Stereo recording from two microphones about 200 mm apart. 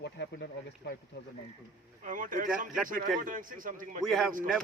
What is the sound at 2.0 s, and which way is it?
Speech, 40° right (ahead or behind).